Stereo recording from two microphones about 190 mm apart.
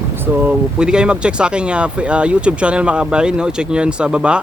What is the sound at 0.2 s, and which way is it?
Speech, 5° right (ahead or behind).